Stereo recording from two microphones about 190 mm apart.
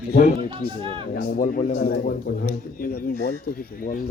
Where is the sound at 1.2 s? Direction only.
50° left (ahead or behind).